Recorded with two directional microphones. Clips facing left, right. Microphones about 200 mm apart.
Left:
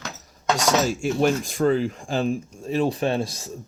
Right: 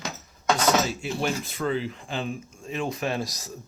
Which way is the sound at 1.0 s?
45° left (ahead or behind).